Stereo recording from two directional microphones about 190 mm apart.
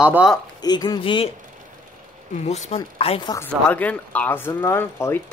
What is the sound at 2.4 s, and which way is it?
Speech, 35° left (ahead or behind).